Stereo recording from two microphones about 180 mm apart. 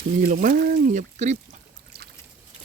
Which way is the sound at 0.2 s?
50° right (ahead or behind).